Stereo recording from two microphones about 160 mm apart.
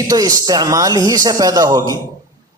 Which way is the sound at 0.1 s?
20° right (ahead or behind).